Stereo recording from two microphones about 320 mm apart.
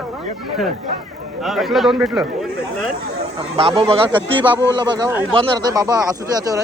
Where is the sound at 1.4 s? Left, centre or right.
Centre.